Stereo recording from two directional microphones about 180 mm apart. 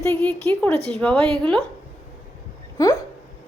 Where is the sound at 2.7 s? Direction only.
15° left (ahead or behind).